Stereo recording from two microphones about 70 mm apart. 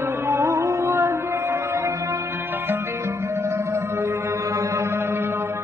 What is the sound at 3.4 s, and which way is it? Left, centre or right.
Music, right.